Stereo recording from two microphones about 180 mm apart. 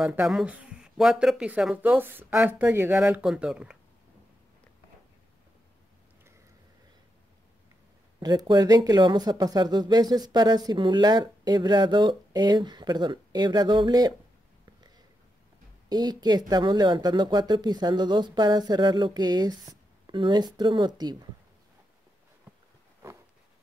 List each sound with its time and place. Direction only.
0.0 s speech: 10° right (ahead or behind)
8.2 s speech: 20° right (ahead or behind)
15.9 s speech: 20° right (ahead or behind)